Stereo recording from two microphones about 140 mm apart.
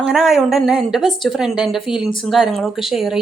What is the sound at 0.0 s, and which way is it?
A woman's voice, 5° right (ahead or behind).